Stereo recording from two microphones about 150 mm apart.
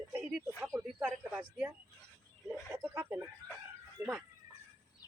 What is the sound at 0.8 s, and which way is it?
Speech, 5° right (ahead or behind).